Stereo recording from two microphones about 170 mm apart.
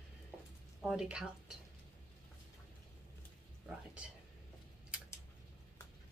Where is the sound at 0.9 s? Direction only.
5° right (ahead or behind).